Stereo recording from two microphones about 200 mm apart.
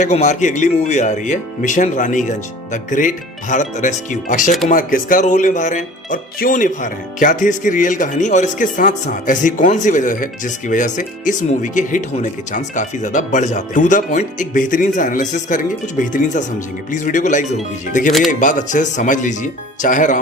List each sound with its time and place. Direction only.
0.0 s speech: 35° left (ahead or behind)